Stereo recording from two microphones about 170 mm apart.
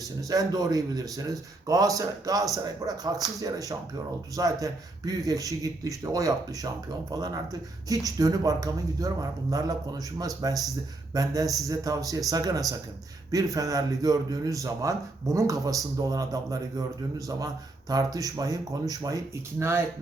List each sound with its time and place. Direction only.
0.2 s a man's voice: 20° right (ahead or behind)